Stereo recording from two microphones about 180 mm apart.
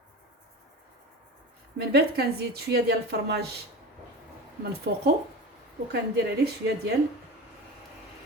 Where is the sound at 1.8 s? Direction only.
65° right (ahead or behind).